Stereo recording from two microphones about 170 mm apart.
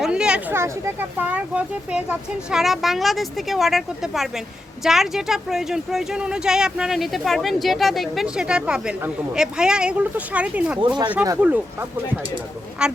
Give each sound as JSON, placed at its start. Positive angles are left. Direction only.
{"t": 0.0, "sound": "speech", "side_deg": -5}
{"t": 10.8, "sound": "speech", "side_deg": -25}
{"t": 11.1, "sound": "speech", "side_deg": -10}